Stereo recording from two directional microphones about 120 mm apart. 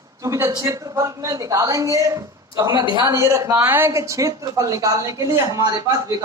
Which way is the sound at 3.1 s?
25° right (ahead or behind).